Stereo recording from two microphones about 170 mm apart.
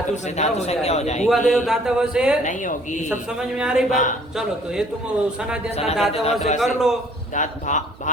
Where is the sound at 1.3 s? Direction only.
Centre (ahead or behind).